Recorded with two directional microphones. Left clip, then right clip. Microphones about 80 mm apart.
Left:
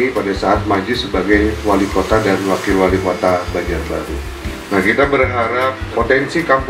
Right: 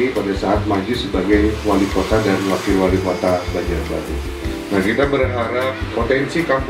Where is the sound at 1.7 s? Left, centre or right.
Left.